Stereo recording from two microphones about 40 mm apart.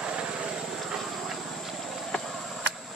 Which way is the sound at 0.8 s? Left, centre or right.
Centre.